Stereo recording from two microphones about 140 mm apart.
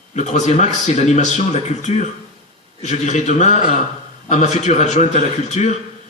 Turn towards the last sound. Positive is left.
turn(degrees=55)  # may be behind; listen again after turning